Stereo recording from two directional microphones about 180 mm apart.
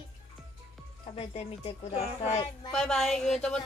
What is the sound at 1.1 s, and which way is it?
Speech, 35° left (ahead or behind).